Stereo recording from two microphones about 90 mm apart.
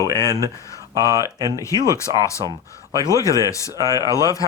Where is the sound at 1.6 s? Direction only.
35° left (ahead or behind).